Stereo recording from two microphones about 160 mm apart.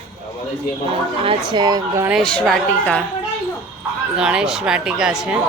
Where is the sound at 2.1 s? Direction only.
Centre (ahead or behind).